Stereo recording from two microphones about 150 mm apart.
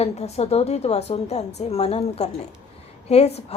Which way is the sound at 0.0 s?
45° left (ahead or behind).